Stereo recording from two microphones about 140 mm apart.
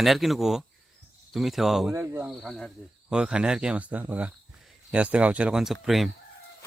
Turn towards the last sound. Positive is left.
turn(degrees=0)  # may be behind; listen again after turning